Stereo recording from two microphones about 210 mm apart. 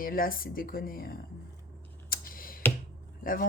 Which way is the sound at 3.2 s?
40° left (ahead or behind).